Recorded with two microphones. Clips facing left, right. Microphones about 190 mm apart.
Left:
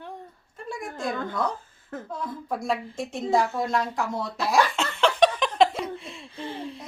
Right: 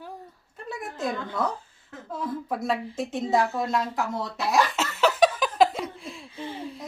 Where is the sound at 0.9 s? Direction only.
50° left (ahead or behind).